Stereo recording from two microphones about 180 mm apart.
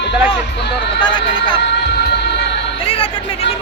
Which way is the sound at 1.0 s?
25° left (ahead or behind).